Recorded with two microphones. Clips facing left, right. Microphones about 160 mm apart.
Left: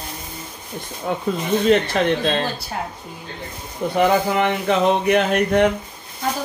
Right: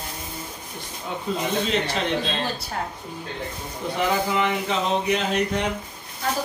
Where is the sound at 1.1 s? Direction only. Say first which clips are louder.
Left 5 dB; 60° left (ahead or behind).